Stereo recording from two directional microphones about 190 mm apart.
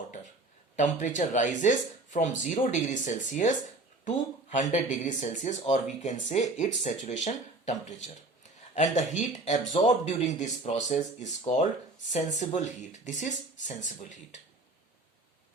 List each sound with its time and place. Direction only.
0.8 s speech: 40° left (ahead or behind)
4.5 s speech: 40° left (ahead or behind)